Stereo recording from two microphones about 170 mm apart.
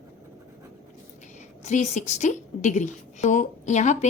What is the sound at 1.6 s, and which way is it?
Speech, 45° left (ahead or behind).